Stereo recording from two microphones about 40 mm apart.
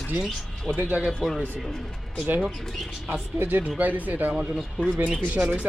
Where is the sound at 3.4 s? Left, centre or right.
Right.